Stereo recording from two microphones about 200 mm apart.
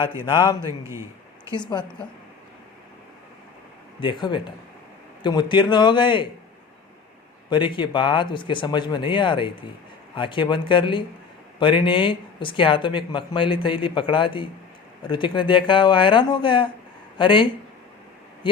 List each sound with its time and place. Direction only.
0.6 s a man's voice: 15° right (ahead or behind)
1.5 s speech: 20° left (ahead or behind)
4.0 s speech: 25° left (ahead or behind)
7.5 s speech: 25° left (ahead or behind)